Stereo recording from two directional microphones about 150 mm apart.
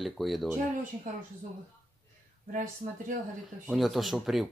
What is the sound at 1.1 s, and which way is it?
Speech, 55° right (ahead or behind).